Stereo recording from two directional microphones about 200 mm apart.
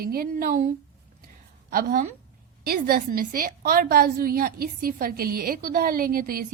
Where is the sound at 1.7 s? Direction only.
45° right (ahead or behind).